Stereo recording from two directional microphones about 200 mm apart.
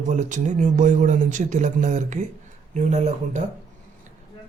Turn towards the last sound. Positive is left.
turn(degrees=-35)  # may be behind; listen again after turning